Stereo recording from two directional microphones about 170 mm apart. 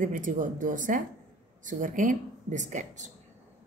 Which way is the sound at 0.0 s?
50° right (ahead or behind).